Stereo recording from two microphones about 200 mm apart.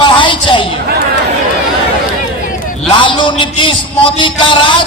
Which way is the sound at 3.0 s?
25° left (ahead or behind).